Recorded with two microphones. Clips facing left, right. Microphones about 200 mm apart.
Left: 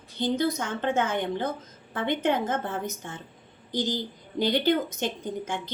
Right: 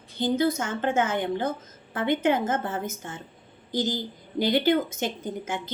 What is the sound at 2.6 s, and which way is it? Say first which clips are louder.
Speech: right 1 dB; 60° left (ahead or behind).